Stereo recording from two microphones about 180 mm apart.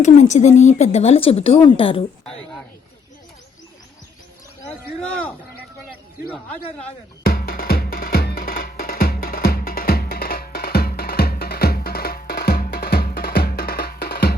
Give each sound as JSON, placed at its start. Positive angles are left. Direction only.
{"t": 0.0, "sound": "speech", "side_deg": 40}
{"t": 7.3, "sound": "music", "side_deg": 55}